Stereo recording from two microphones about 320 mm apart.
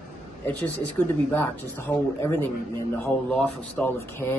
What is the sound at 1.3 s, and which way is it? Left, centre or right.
Speech, centre.